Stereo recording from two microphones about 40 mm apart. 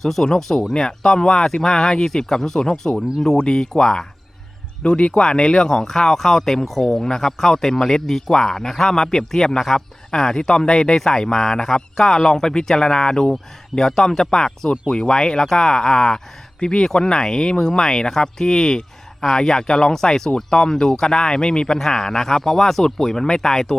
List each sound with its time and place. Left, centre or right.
0.0 s speech: centre
4.8 s speech: left; by 23.7 s centre